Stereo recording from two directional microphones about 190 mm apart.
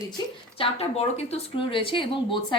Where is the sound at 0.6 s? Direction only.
30° left (ahead or behind).